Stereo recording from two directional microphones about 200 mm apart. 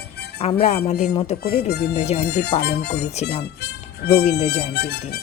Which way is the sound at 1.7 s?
55° left (ahead or behind).